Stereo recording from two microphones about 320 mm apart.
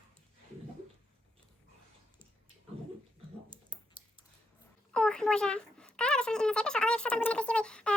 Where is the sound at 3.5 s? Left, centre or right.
Centre.